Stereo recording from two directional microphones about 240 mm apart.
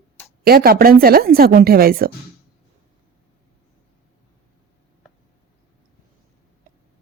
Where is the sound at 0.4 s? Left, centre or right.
Right.